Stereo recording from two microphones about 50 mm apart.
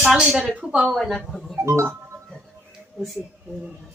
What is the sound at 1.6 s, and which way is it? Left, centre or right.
Music, right.